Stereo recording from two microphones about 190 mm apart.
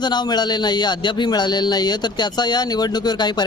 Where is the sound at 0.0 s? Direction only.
20° left (ahead or behind).